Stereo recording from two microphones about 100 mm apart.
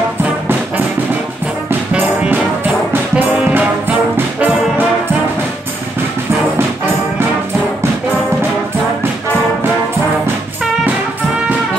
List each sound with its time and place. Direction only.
1.7 s brass instrument: 15° right (ahead or behind)